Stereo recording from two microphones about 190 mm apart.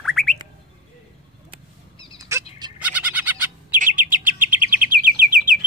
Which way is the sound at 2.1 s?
15° right (ahead or behind).